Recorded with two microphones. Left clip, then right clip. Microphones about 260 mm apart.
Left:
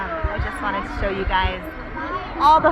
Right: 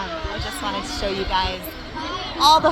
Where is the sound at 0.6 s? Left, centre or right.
Centre.